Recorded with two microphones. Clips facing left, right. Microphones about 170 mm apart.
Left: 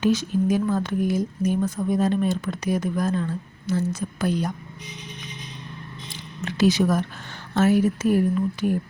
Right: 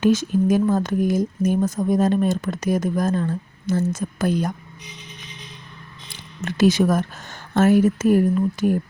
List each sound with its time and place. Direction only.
0.0 s speech: 50° right (ahead or behind)
6.4 s speech: 50° right (ahead or behind)